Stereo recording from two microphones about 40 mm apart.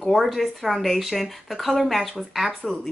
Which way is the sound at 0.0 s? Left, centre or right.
Centre.